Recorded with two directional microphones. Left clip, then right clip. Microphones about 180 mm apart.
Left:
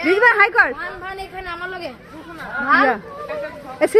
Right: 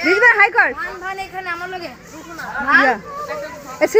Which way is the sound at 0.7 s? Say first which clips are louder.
Right 3 dB; 65° left (ahead or behind).